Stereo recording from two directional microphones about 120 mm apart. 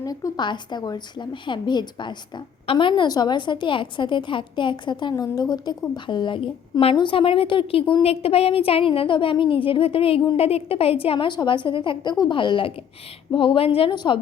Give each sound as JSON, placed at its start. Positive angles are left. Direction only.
{"t": 0.0, "sound": "a woman's voice", "side_deg": 30}